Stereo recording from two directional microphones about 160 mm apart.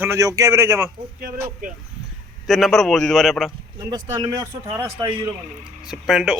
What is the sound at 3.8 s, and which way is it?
Speech, 25° right (ahead or behind).